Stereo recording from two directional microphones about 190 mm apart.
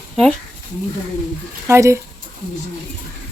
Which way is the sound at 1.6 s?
15° right (ahead or behind).